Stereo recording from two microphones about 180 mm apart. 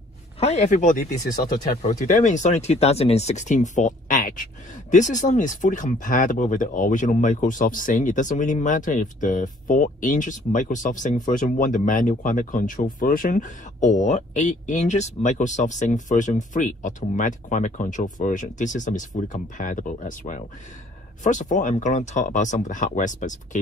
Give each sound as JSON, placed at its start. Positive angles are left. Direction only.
{"t": 0.4, "sound": "speech", "side_deg": 40}